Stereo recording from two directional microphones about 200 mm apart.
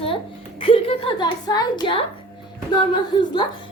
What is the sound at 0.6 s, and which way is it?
A woman's voice, 30° left (ahead or behind).